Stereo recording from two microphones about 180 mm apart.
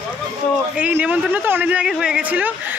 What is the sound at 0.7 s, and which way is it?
Speech, 10° right (ahead or behind).